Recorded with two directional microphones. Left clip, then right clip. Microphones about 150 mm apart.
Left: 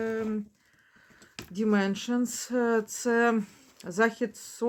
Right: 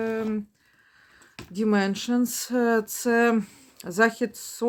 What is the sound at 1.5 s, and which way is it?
Speech, 30° right (ahead or behind).